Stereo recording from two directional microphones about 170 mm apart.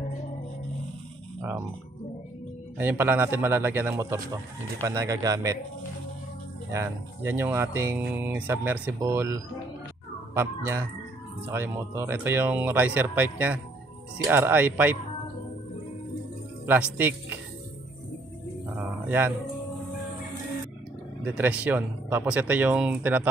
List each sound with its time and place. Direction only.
2.8 s speech: 10° right (ahead or behind)
6.7 s speech: 15° right (ahead or behind)
16.6 s speech: 10° right (ahead or behind)
18.8 s music: 10° right (ahead or behind)
21.2 s speech: 10° right (ahead or behind)